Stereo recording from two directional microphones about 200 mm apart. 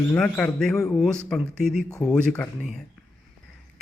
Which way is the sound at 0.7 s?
15° left (ahead or behind).